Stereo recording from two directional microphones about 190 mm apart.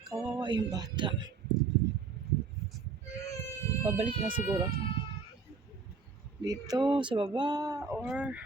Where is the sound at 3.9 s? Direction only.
25° right (ahead or behind).